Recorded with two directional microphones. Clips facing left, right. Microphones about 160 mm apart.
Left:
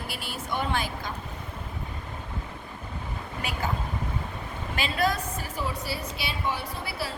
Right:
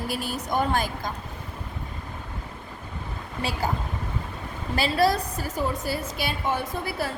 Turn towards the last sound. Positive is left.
turn(degrees=-50)  # may be behind; listen again after turning